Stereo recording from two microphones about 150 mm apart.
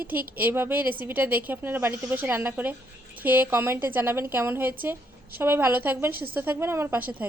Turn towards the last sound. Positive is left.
turn(degrees=-15)  # may be behind; listen again after turning